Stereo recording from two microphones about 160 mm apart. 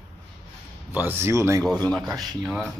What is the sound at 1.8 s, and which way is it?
Speech, centre (ahead or behind).